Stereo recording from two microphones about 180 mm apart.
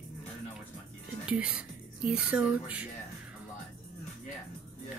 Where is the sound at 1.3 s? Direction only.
5° right (ahead or behind).